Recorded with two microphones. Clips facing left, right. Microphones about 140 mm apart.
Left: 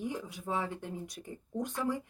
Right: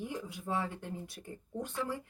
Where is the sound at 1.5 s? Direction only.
15° left (ahead or behind).